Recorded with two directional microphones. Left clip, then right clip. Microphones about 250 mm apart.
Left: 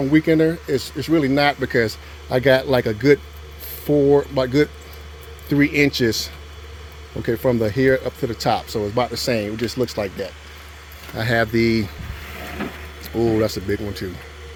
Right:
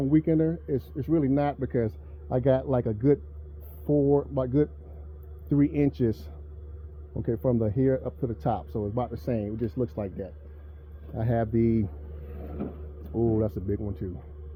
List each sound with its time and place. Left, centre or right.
0.1 s speech: centre
3.8 s speech: centre
4.4 s speech: centre
11.2 s speech: centre
13.1 s speech: centre